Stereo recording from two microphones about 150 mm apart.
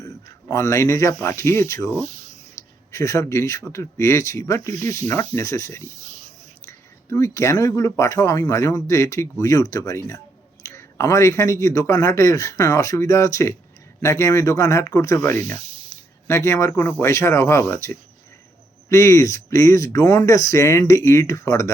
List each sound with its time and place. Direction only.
0.5 s speech: 20° left (ahead or behind)
2.0 s speech: 55° right (ahead or behind)
2.6 s speech: 20° left (ahead or behind)
7.1 s speech: 20° left (ahead or behind)